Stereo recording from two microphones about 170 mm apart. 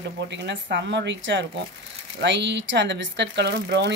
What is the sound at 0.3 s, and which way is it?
Speech, 90° right.